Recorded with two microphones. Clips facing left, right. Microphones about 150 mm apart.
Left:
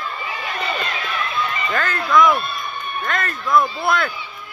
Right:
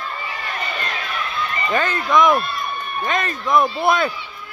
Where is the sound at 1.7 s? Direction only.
15° right (ahead or behind).